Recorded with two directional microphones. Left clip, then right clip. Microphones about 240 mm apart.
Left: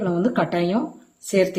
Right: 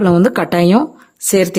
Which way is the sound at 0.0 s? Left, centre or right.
Right.